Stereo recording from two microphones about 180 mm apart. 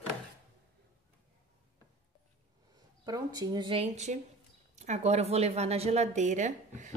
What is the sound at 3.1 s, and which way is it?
A woman's voice, 20° right (ahead or behind).